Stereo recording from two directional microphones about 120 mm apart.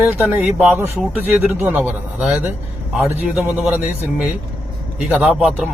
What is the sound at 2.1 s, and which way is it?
A man's voice, 5° right (ahead or behind).